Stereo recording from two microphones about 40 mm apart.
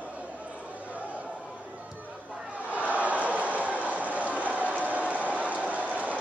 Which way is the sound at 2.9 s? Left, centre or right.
Right.